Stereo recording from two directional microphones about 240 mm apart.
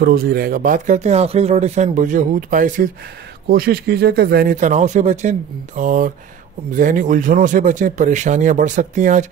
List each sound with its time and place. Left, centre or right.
0.0 s speech: right